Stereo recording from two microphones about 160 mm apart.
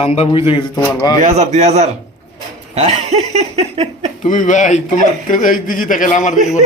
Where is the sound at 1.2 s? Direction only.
45° right (ahead or behind).